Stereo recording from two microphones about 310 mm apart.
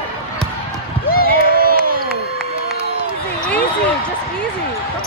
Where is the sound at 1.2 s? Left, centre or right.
Right.